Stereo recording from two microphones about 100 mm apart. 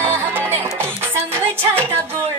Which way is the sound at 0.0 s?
25° right (ahead or behind).